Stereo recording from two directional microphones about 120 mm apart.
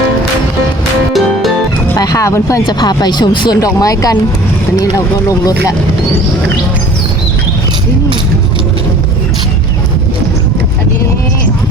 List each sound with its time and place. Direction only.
1.1 s music: centre (ahead or behind)
2.0 s speech: 30° left (ahead or behind)